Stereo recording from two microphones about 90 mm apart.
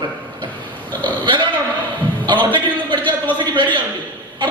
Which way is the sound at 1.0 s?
65° right (ahead or behind).